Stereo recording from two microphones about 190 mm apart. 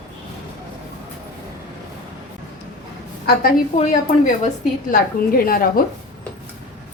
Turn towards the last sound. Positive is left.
turn(degrees=50)  # may be behind; listen again after turning